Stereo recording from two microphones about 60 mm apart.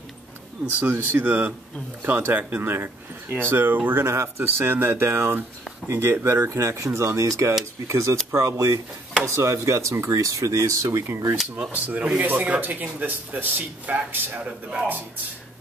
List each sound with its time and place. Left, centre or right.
0.7 s speech: right
4.0 s speech: right
9.2 s speech: right
11.7 s speech: right